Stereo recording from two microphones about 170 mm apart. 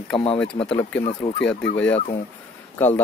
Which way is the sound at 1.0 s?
45° left (ahead or behind).